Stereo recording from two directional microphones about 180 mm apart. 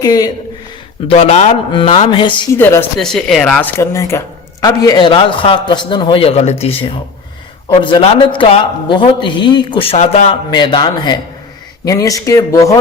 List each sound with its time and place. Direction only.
0.0 s a man's voice: 20° left (ahead or behind)
1.0 s a man's voice: 35° left (ahead or behind)
2.5 s speech: 15° left (ahead or behind)
3.0 s a man's voice: 5° left (ahead or behind)